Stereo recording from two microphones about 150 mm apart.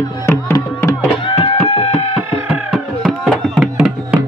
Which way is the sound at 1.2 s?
35° left (ahead or behind).